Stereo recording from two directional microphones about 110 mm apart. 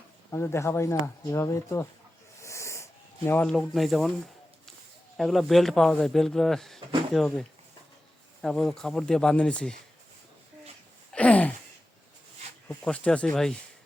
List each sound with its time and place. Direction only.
0.3 s speech: 20° left (ahead or behind)
2.4 s a sound: 25° left (ahead or behind)
3.4 s speech: 5° left (ahead or behind)
5.1 s speech: centre (ahead or behind)
8.4 s speech: 5° left (ahead or behind)
11.1 s a sound: 10° left (ahead or behind)
12.6 s speech: 10° left (ahead or behind)